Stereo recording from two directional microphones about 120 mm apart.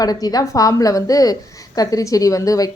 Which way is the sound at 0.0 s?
30° left (ahead or behind).